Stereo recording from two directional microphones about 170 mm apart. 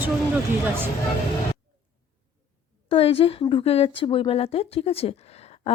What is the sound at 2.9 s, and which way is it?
Speech, 35° left (ahead or behind).